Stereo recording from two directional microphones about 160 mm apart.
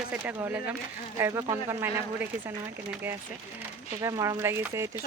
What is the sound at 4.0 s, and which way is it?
Speech, 20° right (ahead or behind).